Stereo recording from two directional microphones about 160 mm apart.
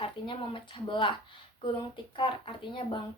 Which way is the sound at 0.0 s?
35° left (ahead or behind).